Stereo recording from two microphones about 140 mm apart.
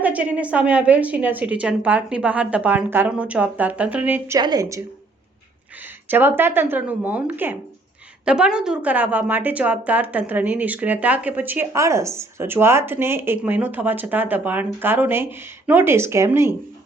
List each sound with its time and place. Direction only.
0.0 s a woman's voice: 10° right (ahead or behind)
4.4 s a woman's voice: 30° right (ahead or behind)
6.1 s a woman's voice: 15° right (ahead or behind)